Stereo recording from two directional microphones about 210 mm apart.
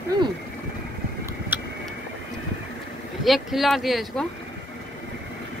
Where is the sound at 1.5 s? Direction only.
10° right (ahead or behind).